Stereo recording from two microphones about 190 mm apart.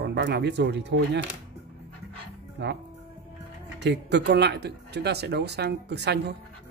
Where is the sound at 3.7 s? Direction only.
65° right (ahead or behind).